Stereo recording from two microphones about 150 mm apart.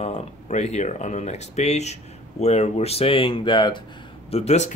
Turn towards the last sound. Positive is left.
turn(degrees=50)  # may be behind; listen again after turning